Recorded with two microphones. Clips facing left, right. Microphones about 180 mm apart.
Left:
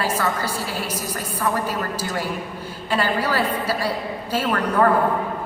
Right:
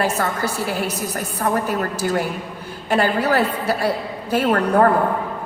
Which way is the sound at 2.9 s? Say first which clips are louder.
Right 4 dB; 55° right (ahead or behind).